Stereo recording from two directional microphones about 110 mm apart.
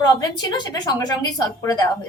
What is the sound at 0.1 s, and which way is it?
A woman's voice, 40° left (ahead or behind).